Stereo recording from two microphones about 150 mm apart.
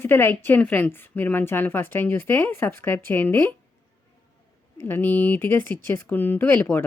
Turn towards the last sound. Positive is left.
turn(degrees=15)  # may be behind; listen again after turning